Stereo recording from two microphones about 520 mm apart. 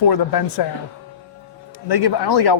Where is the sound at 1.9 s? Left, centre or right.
Left.